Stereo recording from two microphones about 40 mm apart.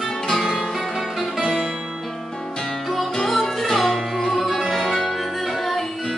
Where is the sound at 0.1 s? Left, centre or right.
Centre.